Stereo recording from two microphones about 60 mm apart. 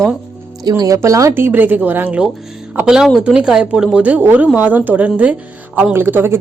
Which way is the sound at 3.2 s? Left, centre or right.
Centre.